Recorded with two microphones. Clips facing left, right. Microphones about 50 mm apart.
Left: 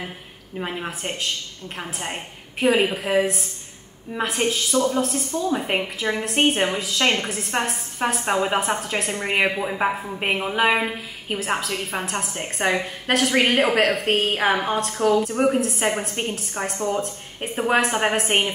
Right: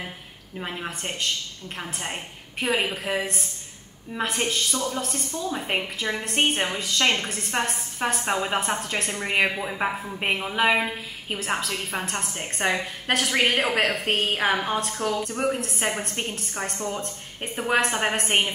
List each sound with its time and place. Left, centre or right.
0.6 s a woman's voice: centre
4.7 s a woman's voice: centre
5.0 s a woman's voice: centre
17.0 s a woman's voice: centre